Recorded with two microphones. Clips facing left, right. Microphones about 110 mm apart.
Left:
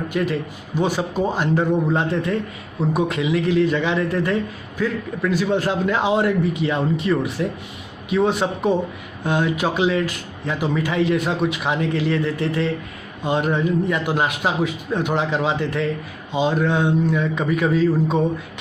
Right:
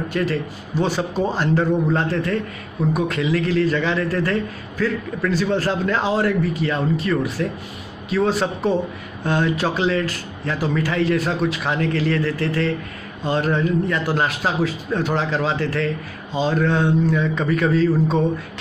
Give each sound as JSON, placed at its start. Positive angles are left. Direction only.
{"t": 0.1, "sound": "a man's voice", "side_deg": 15}